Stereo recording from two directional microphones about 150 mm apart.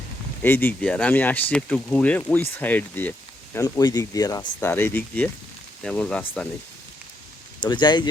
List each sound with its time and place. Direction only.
0.4 s speech: 15° left (ahead or behind)
3.6 s speech: 25° left (ahead or behind); by 6.5 s 5° left (ahead or behind)
7.6 s speech: 30° left (ahead or behind)